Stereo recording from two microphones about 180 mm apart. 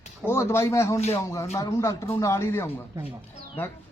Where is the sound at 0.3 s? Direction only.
15° left (ahead or behind).